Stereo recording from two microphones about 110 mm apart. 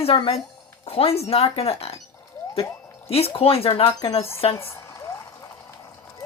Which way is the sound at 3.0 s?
65° left (ahead or behind).